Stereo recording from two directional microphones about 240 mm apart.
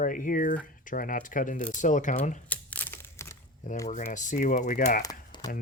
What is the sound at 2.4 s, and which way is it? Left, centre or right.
Crumpling, centre.